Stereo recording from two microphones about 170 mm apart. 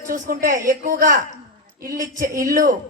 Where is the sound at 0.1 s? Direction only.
55° right (ahead or behind).